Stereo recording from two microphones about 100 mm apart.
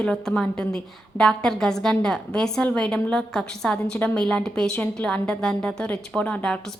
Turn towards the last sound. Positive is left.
turn(degrees=10)  # may be behind; listen again after turning